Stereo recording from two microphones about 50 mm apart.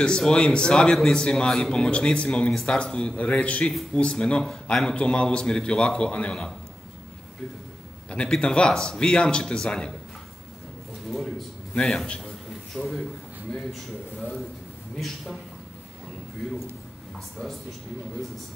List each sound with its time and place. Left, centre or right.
0.0 s speech: centre
8.1 s a man's voice: centre
11.1 s speech: centre
11.7 s a man's voice: centre
12.7 s speech: centre
15.0 s speech: centre